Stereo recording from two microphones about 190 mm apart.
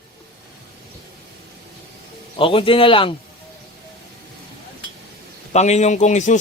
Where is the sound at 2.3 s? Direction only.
25° left (ahead or behind).